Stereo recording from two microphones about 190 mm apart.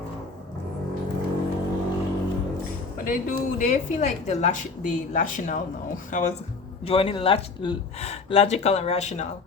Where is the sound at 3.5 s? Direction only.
40° left (ahead or behind).